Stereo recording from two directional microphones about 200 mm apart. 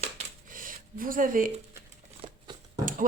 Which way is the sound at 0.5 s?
45° right (ahead or behind).